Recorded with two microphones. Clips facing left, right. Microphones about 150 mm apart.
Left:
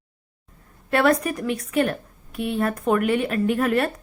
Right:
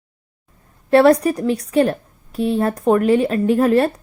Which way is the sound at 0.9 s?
35° right (ahead or behind).